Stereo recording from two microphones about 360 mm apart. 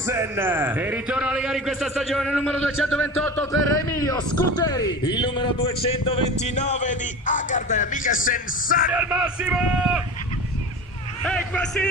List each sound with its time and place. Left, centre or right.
0.0 s a man's voice: centre; by 8.9 s left
8.9 s a man's voice: centre
11.2 s a man's voice: centre